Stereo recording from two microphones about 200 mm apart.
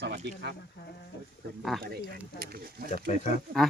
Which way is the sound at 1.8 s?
50° right (ahead or behind).